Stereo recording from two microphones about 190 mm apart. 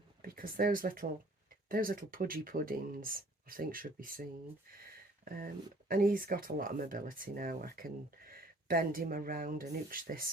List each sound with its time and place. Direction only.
0.2 s speech: 50° right (ahead or behind)
5.9 s speech: 50° right (ahead or behind)